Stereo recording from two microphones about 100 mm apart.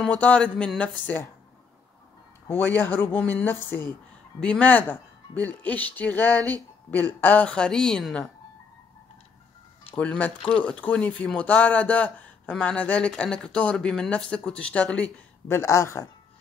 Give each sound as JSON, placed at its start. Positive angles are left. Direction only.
{"t": 0.2, "sound": "speech", "side_deg": 10}
{"t": 2.5, "sound": "speech", "side_deg": 20}
{"t": 9.9, "sound": "speech", "side_deg": 15}
{"t": 15.5, "sound": "speech", "side_deg": 25}